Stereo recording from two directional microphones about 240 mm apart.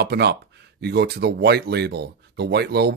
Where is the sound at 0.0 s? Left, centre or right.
Right.